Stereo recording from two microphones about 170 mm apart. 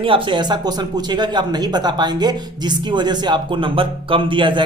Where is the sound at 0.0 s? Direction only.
30° right (ahead or behind).